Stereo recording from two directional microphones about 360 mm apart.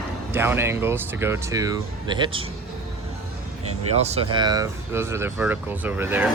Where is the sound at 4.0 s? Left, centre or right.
Centre.